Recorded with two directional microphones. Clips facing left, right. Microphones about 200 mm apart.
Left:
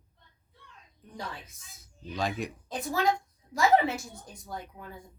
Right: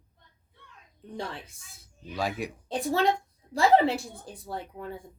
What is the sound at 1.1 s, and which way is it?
Speech, 30° right (ahead or behind).